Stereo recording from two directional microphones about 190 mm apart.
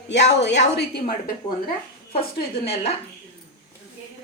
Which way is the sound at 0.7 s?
55° left (ahead or behind).